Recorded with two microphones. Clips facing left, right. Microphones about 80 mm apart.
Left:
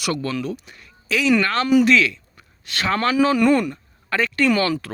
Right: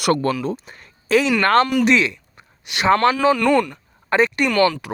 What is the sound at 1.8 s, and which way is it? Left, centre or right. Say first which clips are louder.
A man's voice: even; right.